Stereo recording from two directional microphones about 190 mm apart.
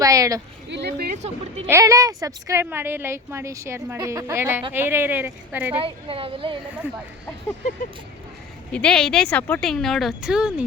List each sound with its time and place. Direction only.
0.0 s speech: 20° right (ahead or behind)
0.7 s speech: 60° right (ahead or behind)
1.1 s a woman's voice: 35° right (ahead or behind)
1.6 s speech: 15° right (ahead or behind)
5.7 s a woman's voice: 30° right (ahead or behind)
8.7 s speech: 5° left (ahead or behind)